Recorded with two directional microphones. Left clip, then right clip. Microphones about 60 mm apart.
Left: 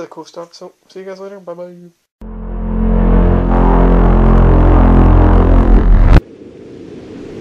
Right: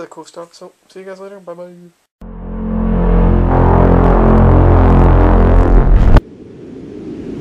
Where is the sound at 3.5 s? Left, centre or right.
Centre.